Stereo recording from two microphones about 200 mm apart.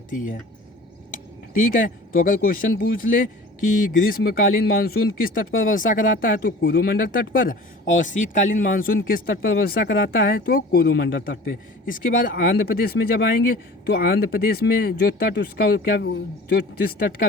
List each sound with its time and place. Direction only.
0.1 s speech: 40° left (ahead or behind)